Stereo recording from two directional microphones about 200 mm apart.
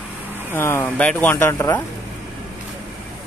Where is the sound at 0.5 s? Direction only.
10° left (ahead or behind).